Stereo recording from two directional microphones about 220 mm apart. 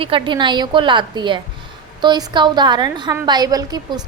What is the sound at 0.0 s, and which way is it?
A woman's voice, 20° right (ahead or behind).